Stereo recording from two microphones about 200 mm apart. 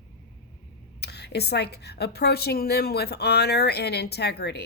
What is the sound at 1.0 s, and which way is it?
A woman's voice, 55° left (ahead or behind).